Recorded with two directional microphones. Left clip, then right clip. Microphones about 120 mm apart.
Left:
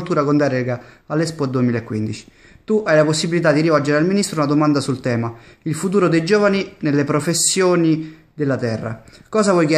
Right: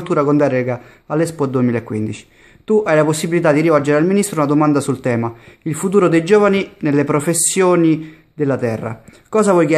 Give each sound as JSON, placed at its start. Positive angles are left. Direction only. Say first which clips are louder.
{"t": 0.0, "sound": "a man's voice", "louder": "right 3 dB", "side_deg": -20}